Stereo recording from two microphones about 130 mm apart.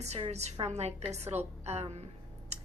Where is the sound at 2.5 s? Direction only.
55° right (ahead or behind).